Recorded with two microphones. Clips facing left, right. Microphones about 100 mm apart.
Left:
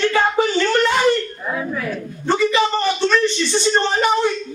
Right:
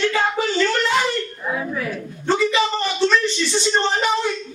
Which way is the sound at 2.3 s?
55° left (ahead or behind).